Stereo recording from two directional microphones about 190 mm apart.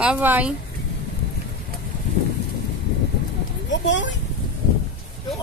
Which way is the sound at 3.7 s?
70° left (ahead or behind).